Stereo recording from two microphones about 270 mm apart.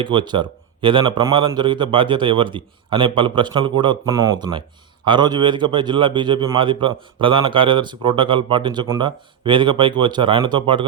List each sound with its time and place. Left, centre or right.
0.0 s a man's voice: centre